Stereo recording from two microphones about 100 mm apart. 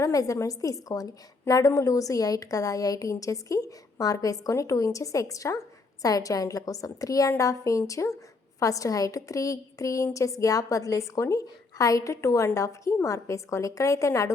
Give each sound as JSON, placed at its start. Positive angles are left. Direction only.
{"t": 0.0, "sound": "a woman's voice", "side_deg": 35}